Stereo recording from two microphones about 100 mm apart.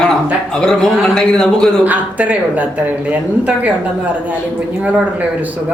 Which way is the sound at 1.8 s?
15° right (ahead or behind).